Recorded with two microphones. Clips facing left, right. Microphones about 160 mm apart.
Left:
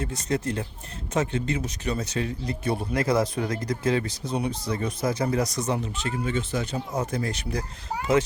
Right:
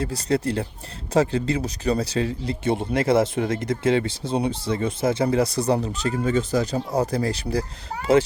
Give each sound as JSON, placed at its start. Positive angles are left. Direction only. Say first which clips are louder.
{"t": 0.0, "sound": "speech", "louder": "right 4 dB", "side_deg": -35}